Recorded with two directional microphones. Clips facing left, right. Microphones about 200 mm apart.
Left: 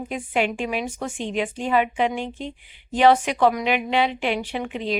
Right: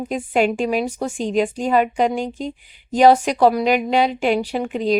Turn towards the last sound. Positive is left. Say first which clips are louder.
# right 6 dB
turn(degrees=-40)  # may be behind; listen again after turning